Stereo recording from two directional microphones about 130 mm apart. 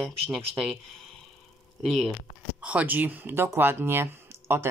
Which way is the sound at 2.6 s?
10° right (ahead or behind).